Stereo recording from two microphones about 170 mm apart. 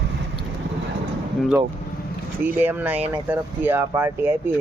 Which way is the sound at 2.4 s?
10° right (ahead or behind).